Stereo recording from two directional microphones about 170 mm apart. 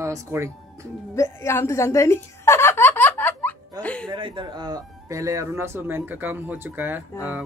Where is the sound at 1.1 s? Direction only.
15° left (ahead or behind).